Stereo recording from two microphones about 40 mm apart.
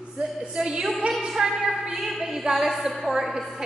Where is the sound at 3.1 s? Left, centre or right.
Centre.